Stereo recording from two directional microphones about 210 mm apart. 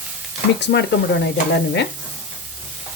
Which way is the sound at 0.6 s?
55° left (ahead or behind).